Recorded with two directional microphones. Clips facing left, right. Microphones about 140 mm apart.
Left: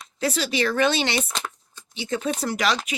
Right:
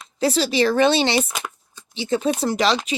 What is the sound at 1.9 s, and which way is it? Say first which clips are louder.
Speech: right 5 dB; 30° right (ahead or behind).